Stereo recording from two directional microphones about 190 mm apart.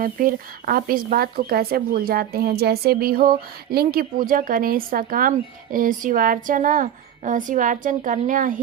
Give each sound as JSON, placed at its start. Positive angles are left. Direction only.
{"t": 0.0, "sound": "speech", "side_deg": -50}